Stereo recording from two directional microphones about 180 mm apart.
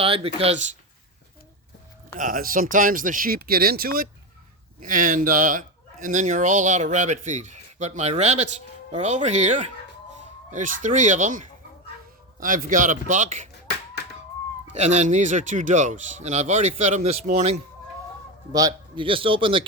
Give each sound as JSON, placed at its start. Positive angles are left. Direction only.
{"t": 0.0, "sound": "speech", "side_deg": -30}
{"t": 2.1, "sound": "speech", "side_deg": -50}
{"t": 14.7, "sound": "speech", "side_deg": -40}
{"t": 18.5, "sound": "a man's voice", "side_deg": -25}